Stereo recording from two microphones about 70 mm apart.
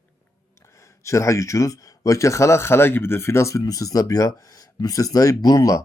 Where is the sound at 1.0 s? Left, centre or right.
Left.